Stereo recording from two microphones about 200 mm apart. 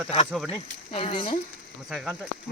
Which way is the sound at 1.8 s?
Centre (ahead or behind).